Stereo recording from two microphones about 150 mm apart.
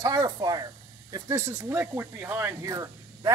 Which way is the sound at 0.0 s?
25° right (ahead or behind).